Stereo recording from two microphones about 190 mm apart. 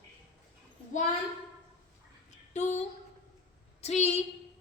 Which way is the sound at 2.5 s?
35° left (ahead or behind).